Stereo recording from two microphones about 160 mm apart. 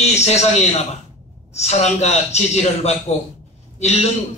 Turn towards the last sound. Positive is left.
turn(degrees=45)  # may be behind; listen again after turning